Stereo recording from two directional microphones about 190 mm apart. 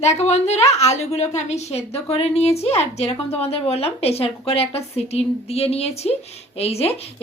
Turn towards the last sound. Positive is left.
turn(degrees=30)  # may be behind; listen again after turning